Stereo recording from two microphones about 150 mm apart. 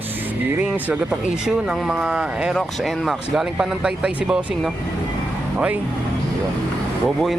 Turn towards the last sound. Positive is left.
turn(degrees=0)  # may be behind; listen again after turning